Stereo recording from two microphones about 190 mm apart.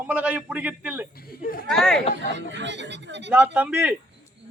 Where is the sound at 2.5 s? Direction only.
70° right (ahead or behind).